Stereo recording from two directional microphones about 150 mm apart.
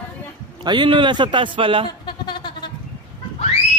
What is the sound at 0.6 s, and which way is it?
A man's voice, 30° right (ahead or behind).